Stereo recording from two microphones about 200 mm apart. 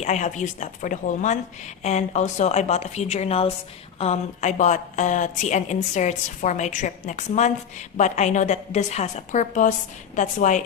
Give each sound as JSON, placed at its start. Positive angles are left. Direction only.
{"t": 0.0, "sound": "a woman's voice", "side_deg": 35}